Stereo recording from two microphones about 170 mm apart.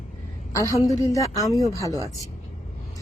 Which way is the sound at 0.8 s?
20° left (ahead or behind).